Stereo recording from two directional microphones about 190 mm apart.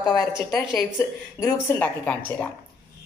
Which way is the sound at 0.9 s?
15° left (ahead or behind).